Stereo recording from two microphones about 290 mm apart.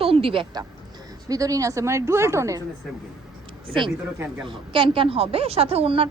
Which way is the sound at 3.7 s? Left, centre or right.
Centre.